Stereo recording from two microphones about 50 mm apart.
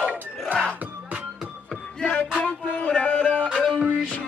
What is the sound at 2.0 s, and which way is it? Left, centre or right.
Music, centre.